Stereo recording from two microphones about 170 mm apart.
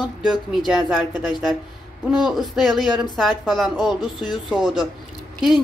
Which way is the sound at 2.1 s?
Centre (ahead or behind).